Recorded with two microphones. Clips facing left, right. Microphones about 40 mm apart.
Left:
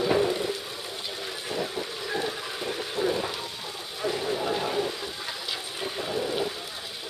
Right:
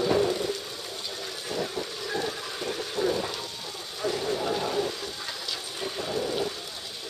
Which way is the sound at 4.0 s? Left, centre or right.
Left.